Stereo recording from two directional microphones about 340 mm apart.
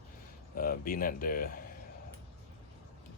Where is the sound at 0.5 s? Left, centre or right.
Left.